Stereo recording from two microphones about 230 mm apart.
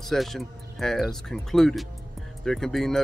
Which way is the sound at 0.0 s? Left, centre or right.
Centre.